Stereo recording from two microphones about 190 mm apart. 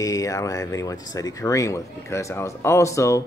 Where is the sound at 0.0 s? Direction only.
15° left (ahead or behind).